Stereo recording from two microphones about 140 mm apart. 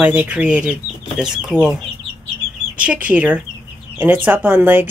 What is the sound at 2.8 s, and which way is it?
Speech, 10° right (ahead or behind).